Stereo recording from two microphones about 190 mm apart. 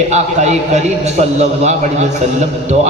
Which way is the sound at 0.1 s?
40° right (ahead or behind).